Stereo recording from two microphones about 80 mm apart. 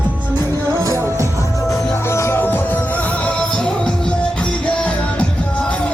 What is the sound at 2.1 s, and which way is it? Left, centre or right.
Music, left.